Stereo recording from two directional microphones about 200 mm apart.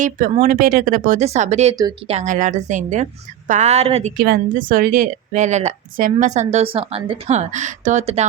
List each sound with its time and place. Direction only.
0.0 s a woman's voice: 40° right (ahead or behind)
1.7 s speech: 20° right (ahead or behind)
2.0 s a woman's voice: 35° right (ahead or behind)
4.2 s a woman's voice: 45° right (ahead or behind)